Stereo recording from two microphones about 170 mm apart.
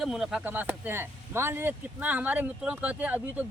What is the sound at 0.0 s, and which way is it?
Speech, 5° right (ahead or behind).